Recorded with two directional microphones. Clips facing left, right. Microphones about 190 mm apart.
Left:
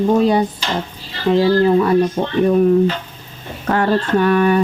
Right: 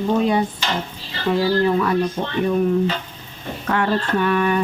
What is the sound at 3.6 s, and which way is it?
Speech, 40° left (ahead or behind).